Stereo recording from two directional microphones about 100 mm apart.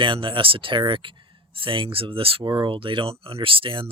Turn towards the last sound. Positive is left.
turn(degrees=-60)  # may be behind; listen again after turning